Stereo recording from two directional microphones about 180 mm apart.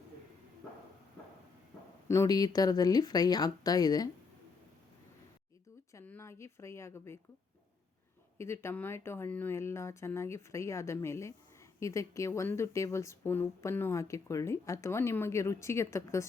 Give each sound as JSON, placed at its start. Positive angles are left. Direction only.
{"t": 2.0, "sound": "speech", "side_deg": 20}
{"t": 5.9, "sound": "speech", "side_deg": 15}
{"t": 8.4, "sound": "speech", "side_deg": 15}